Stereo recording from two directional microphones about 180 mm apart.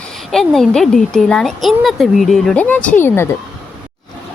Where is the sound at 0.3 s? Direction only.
Centre (ahead or behind).